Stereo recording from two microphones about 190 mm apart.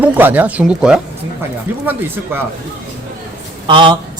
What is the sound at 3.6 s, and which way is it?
Speech, 25° right (ahead or behind).